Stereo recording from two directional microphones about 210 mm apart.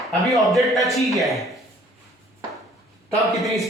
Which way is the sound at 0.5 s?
Centre (ahead or behind).